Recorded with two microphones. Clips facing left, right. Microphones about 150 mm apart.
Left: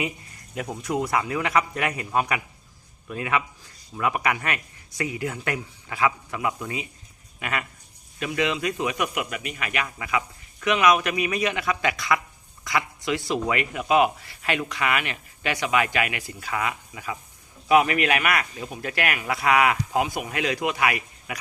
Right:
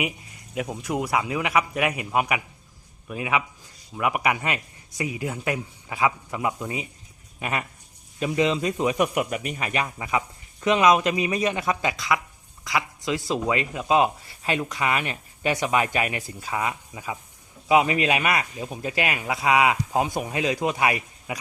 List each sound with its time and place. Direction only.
0.5 s speech: 10° right (ahead or behind); by 21.3 s 25° right (ahead or behind)